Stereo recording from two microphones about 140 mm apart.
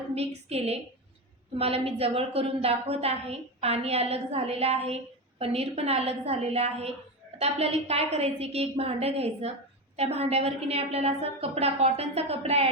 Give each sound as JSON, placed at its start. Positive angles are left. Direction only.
{"t": 0.1, "sound": "a woman's voice", "side_deg": -45}